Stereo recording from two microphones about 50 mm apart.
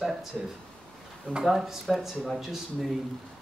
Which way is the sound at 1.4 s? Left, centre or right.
Centre.